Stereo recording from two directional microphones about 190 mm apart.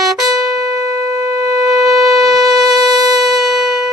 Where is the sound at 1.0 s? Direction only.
20° right (ahead or behind).